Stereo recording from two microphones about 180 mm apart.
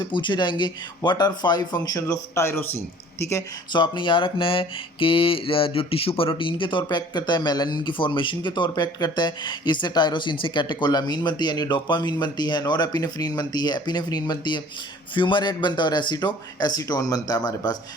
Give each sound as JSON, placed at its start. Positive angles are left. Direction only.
{"t": 0.0, "sound": "speech", "side_deg": 25}